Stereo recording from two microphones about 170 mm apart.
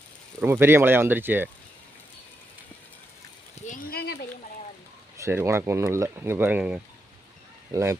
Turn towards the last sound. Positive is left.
turn(degrees=-15)  # may be behind; listen again after turning